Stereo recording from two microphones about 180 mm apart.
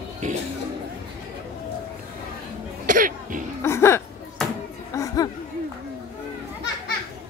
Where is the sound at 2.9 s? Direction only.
45° right (ahead or behind).